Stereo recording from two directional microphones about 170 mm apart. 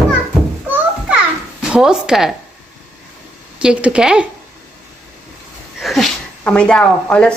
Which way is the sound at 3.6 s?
5° right (ahead or behind).